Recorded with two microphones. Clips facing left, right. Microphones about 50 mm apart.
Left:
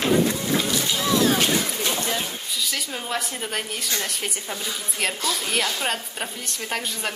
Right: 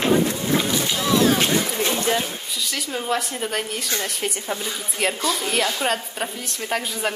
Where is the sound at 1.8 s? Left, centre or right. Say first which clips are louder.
Right 4 dB; right.